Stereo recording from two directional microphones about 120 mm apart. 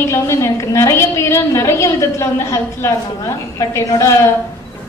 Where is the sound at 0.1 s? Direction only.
25° left (ahead or behind).